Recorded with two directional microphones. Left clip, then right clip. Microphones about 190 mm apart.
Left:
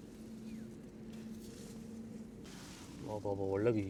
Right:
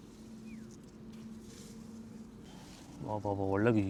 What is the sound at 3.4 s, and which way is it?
Speech, 90° right.